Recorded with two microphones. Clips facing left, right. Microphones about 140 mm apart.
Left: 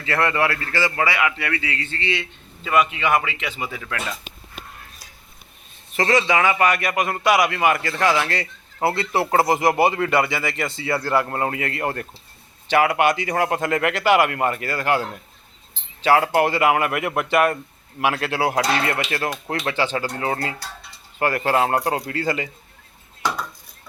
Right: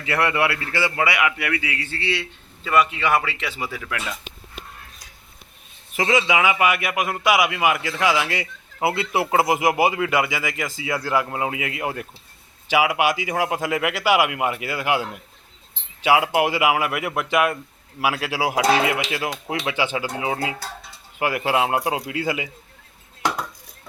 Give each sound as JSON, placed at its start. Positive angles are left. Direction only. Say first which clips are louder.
{"t": 0.0, "sound": "a man's voice", "louder": "even", "side_deg": -15}
{"t": 2.6, "sound": "speech", "louder": "even", "side_deg": 10}
{"t": 3.6, "sound": "a man's voice", "louder": "even", "side_deg": -5}
{"t": 6.0, "sound": "a man's voice", "louder": "left 1 dB", "side_deg": -5}